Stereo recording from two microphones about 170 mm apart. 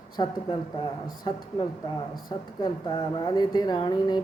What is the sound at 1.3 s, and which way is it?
Speech, 25° left (ahead or behind).